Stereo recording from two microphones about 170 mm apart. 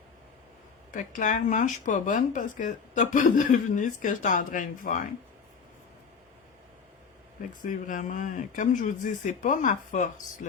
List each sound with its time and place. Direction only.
0.9 s speech: 50° left (ahead or behind)
7.6 s speech: 50° left (ahead or behind)